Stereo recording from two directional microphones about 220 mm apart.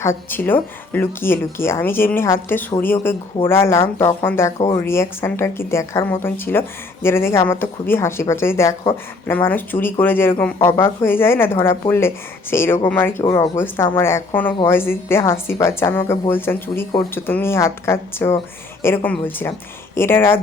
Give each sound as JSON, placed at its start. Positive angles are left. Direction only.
{"t": 0.0, "sound": "speech", "side_deg": 10}
{"t": 4.5, "sound": "speech", "side_deg": 20}
{"t": 4.8, "sound": "speech", "side_deg": 10}